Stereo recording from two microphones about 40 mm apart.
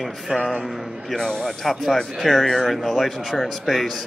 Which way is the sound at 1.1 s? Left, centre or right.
Centre.